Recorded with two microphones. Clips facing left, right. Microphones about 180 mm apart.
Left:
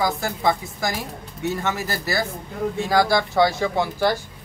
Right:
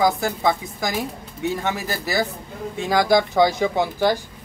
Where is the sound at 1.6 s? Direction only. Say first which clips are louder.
Even; 15° right (ahead or behind).